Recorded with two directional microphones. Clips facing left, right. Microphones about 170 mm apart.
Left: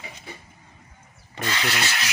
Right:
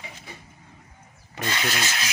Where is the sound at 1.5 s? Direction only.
20° right (ahead or behind).